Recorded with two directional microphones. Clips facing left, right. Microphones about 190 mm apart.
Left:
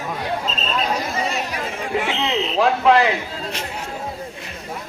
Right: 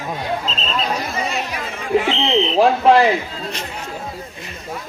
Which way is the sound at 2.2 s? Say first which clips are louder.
Right 2 dB; 30° right (ahead or behind).